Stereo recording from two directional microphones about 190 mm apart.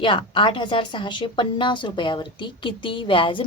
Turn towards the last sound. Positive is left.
turn(degrees=25)  # may be behind; listen again after turning